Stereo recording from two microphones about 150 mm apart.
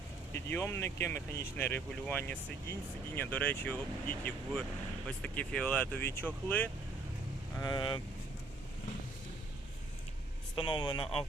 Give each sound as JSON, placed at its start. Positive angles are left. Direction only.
{"t": 0.3, "sound": "speech", "side_deg": 15}
{"t": 7.6, "sound": "speech", "side_deg": 30}
{"t": 10.5, "sound": "speech", "side_deg": 35}